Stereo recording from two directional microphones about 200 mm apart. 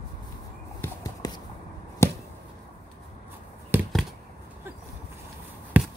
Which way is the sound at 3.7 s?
10° right (ahead or behind).